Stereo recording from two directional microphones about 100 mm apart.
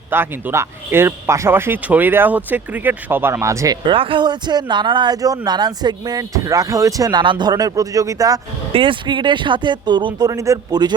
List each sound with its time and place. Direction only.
0.1 s speech: 20° right (ahead or behind)
3.4 s speech: 30° right (ahead or behind)
3.8 s speech: 60° right (ahead or behind); by 8.4 s 35° right (ahead or behind)
8.7 s speech: 60° right (ahead or behind); by 10.8 s 30° right (ahead or behind)